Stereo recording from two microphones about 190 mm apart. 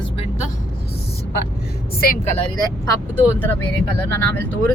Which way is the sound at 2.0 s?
50° left (ahead or behind).